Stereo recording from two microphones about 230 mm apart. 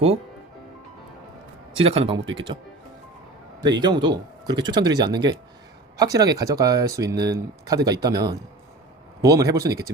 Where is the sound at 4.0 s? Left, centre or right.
Centre.